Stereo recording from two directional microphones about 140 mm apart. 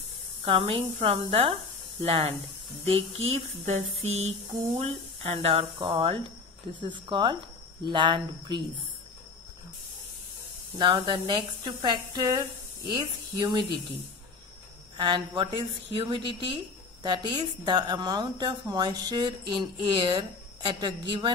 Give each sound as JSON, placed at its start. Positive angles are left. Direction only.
{"t": 0.5, "sound": "a woman's voice", "side_deg": -40}
{"t": 10.8, "sound": "a woman's voice", "side_deg": -35}
{"t": 15.0, "sound": "a woman's voice", "side_deg": -35}